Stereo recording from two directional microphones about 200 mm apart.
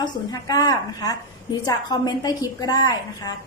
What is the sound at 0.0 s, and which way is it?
A woman's voice, 20° left (ahead or behind).